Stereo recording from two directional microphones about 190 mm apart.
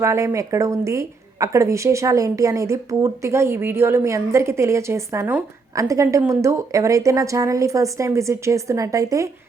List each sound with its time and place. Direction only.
0.0 s speech: 15° right (ahead or behind)